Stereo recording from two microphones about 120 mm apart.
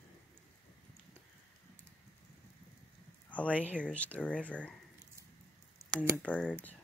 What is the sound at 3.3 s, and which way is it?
Speech, 10° left (ahead or behind).